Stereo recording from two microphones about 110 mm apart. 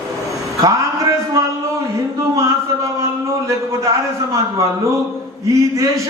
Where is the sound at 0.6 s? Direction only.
30° right (ahead or behind).